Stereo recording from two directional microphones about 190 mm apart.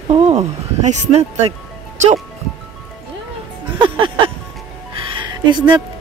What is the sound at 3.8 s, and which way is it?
Music, 25° right (ahead or behind).